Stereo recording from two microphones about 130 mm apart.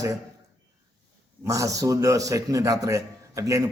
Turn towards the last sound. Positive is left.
turn(degrees=-25)  # may be behind; listen again after turning